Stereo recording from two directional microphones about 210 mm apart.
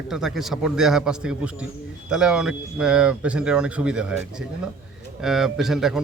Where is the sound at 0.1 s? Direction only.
Centre (ahead or behind).